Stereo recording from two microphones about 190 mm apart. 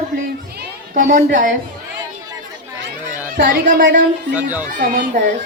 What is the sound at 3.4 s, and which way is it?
Music, 45° right (ahead or behind).